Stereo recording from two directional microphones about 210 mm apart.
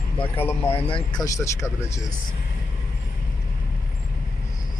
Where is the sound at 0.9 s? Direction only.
20° left (ahead or behind).